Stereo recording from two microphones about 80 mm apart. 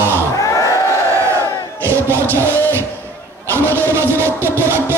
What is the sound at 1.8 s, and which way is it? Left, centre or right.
Music, right.